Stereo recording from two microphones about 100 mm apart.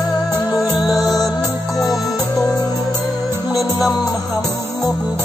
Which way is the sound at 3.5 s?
Centre (ahead or behind).